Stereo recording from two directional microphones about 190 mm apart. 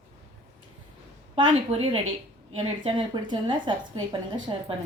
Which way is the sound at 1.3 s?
30° right (ahead or behind).